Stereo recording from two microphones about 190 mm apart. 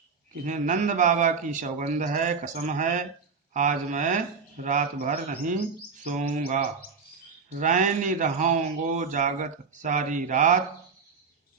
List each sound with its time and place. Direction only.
0.3 s a man's voice: 40° right (ahead or behind)
7.6 s a man's voice: 40° right (ahead or behind)